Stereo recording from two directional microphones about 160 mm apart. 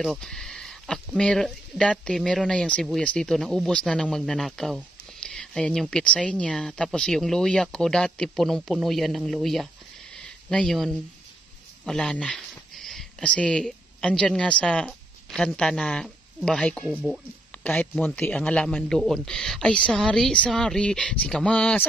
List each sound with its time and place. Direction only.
0.0 s speech: centre (ahead or behind)
10.1 s a sound: 5° left (ahead or behind)
11.8 s speech: 5° left (ahead or behind)
17.5 s speech: 10° left (ahead or behind)